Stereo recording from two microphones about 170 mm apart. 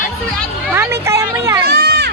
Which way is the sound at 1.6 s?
70° right (ahead or behind).